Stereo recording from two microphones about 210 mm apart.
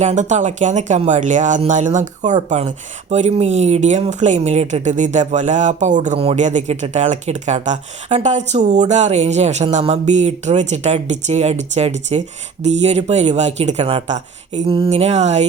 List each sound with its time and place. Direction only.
0.0 s speech: 35° right (ahead or behind)